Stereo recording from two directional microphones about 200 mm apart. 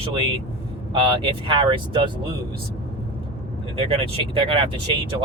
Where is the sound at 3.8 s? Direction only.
25° right (ahead or behind).